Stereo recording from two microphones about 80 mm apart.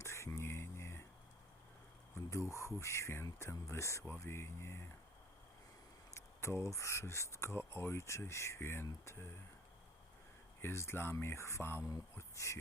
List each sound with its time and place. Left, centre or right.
0.0 s a sound: left
2.1 s speech: left
6.1 s speech: left
10.6 s speech: left